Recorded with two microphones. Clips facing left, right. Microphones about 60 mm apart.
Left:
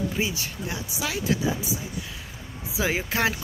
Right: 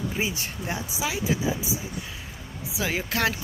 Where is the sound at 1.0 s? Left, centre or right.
Centre.